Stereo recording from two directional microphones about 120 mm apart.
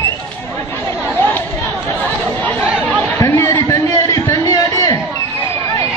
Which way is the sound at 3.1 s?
25° left (ahead or behind).